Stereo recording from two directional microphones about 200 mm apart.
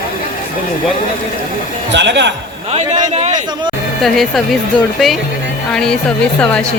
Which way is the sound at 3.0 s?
25° right (ahead or behind).